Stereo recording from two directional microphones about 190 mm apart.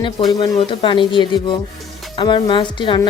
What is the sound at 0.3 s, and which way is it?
Speech, 25° left (ahead or behind).